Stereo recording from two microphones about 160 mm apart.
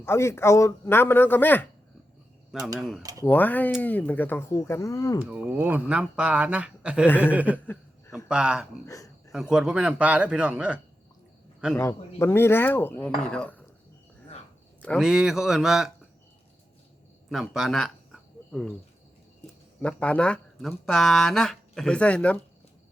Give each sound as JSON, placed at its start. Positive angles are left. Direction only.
{"t": 0.0, "sound": "a man's voice", "side_deg": 15}
{"t": 2.7, "sound": "speech", "side_deg": 0}
{"t": 3.0, "sound": "speech", "side_deg": -20}
{"t": 3.2, "sound": "a man's voice", "side_deg": 10}
{"t": 5.2, "sound": "speech", "side_deg": -10}
{"t": 11.8, "sound": "a man's voice", "side_deg": 15}
{"t": 14.9, "sound": "speech", "side_deg": -5}
{"t": 17.2, "sound": "a sound", "side_deg": 0}
{"t": 19.8, "sound": "speech", "side_deg": 5}